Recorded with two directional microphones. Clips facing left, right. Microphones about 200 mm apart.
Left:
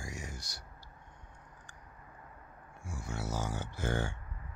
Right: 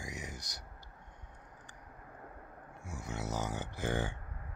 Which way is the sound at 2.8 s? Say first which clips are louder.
Left 1 dB; 20° right (ahead or behind).